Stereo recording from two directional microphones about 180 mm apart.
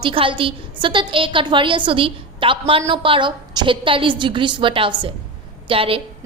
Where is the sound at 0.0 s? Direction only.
30° right (ahead or behind).